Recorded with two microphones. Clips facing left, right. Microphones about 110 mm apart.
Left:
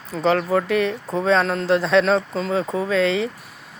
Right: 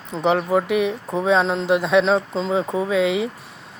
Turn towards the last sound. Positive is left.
turn(degrees=-15)  # may be behind; listen again after turning